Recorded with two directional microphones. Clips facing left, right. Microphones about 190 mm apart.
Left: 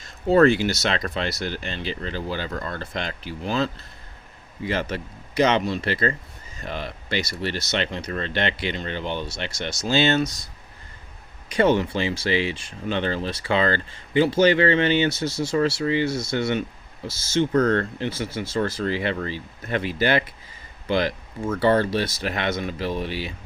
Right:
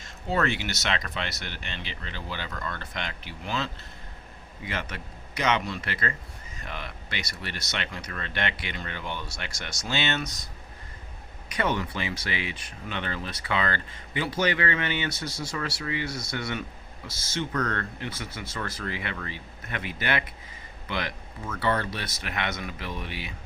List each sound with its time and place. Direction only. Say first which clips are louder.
0.0 s speech: left 11 dB; 35° left (ahead or behind)
11.4 s speech: left 9 dB; 30° left (ahead or behind)